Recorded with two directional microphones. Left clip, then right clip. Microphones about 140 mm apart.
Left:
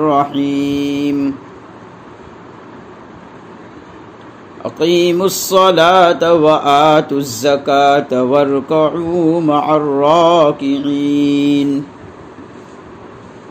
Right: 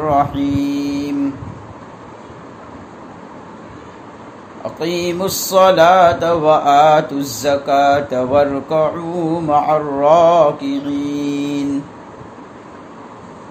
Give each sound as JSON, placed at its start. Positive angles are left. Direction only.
{"t": 0.0, "sound": "mantra", "side_deg": 35}
{"t": 4.7, "sound": "mantra", "side_deg": 35}